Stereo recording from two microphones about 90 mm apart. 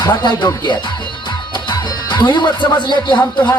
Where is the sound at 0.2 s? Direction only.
55° left (ahead or behind).